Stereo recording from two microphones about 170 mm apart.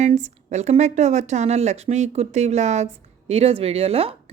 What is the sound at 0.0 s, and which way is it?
Speech, 45° right (ahead or behind).